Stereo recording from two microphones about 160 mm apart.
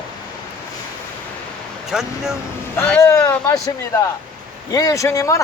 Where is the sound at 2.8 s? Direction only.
15° left (ahead or behind).